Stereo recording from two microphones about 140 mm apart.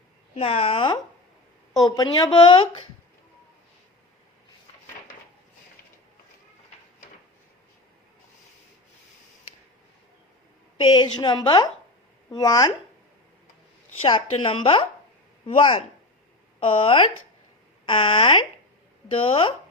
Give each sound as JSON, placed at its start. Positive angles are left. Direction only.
{"t": 0.3, "sound": "a woman's voice", "side_deg": 45}
{"t": 1.7, "sound": "speech", "side_deg": 30}
{"t": 10.8, "sound": "a woman's voice", "side_deg": 35}
{"t": 14.0, "sound": "a woman's voice", "side_deg": 35}